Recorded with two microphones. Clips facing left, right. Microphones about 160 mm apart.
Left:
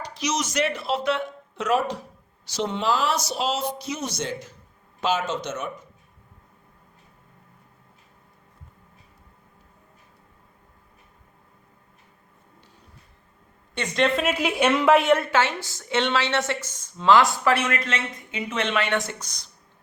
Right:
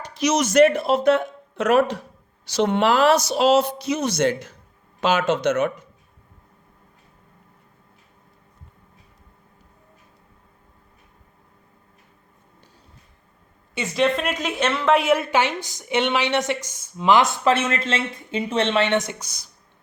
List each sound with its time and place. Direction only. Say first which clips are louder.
0.0 s speech: right 6 dB; 55° right (ahead or behind); by 5.7 s 70° right (ahead or behind)
13.7 s a woman's voice: right 2 dB; 5° right (ahead or behind); by 14.9 s 15° left (ahead or behind)
14.9 s a woman's voice: even; centre (ahead or behind)
15.3 s a woman's voice: right 2 dB; 15° right (ahead or behind)